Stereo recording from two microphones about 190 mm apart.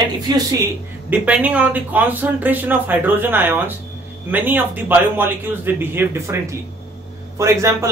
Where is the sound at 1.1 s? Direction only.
10° right (ahead or behind).